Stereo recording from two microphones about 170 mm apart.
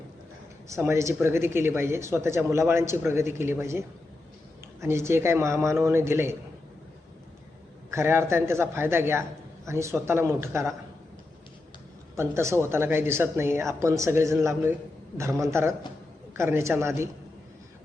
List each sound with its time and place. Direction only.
0.7 s speech: 15° right (ahead or behind)
7.9 s speech: 15° right (ahead or behind)
12.1 s speech: 15° right (ahead or behind)